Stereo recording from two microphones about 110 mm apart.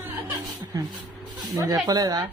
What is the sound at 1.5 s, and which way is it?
Speech, 35° right (ahead or behind).